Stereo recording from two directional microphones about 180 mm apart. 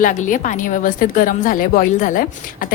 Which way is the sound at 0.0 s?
45° left (ahead or behind).